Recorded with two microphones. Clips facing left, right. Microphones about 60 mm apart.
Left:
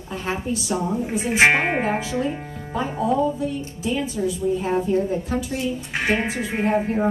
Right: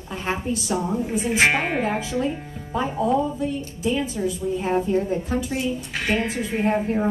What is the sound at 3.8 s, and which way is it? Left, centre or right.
Speech, right.